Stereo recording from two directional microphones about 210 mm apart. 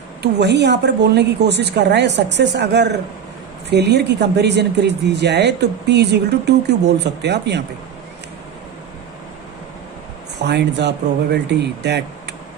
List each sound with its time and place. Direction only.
0.2 s speech: 55° right (ahead or behind)
10.4 s speech: 55° right (ahead or behind)